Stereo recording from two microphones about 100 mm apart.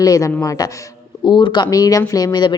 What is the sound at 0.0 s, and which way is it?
Speech, 35° left (ahead or behind).